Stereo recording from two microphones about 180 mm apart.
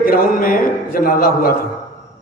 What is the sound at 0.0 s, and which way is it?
A man's voice, 55° left (ahead or behind).